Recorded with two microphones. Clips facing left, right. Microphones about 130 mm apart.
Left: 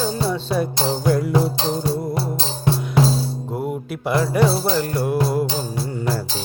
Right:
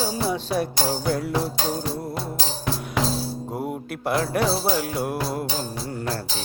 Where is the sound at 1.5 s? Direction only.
25° left (ahead or behind).